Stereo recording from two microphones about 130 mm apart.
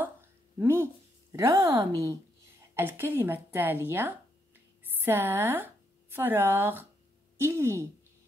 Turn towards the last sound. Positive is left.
turn(degrees=-20)  # may be behind; listen again after turning